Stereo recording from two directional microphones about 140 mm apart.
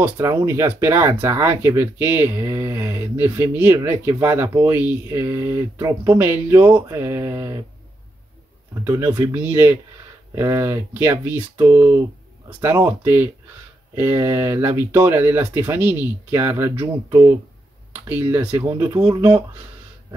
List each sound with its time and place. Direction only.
0.0 s speech: 20° right (ahead or behind)
6.9 s mantra: 20° right (ahead or behind)
8.8 s speech: 20° right (ahead or behind)
18.0 s speech: 15° right (ahead or behind)
19.0 s mantra: 30° right (ahead or behind)